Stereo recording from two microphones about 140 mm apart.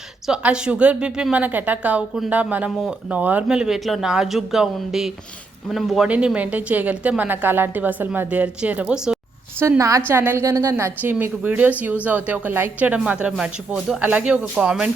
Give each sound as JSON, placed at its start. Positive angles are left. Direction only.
{"t": 0.3, "sound": "a woman's voice", "side_deg": -5}